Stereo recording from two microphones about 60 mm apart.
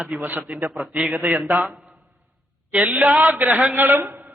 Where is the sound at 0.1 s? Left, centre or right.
Right.